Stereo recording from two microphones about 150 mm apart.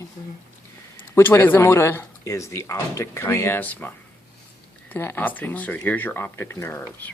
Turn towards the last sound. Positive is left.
turn(degrees=20)  # may be behind; listen again after turning